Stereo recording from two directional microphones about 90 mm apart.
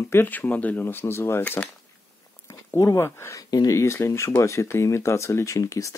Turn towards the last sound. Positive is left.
turn(degrees=35)  # may be behind; listen again after turning